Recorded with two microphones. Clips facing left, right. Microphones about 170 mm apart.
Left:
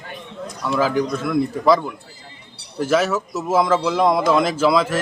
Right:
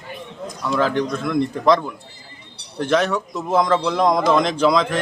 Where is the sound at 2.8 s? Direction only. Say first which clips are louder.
Even; 5° left (ahead or behind).